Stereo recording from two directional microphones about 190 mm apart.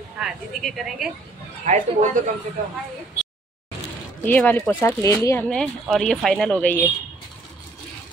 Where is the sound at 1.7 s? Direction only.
35° right (ahead or behind).